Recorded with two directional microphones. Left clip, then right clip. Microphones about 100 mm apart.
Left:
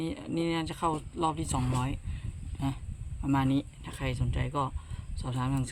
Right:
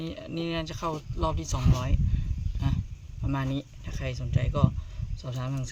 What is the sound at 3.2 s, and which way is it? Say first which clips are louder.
Speech: left 4 dB; 45° left (ahead or behind).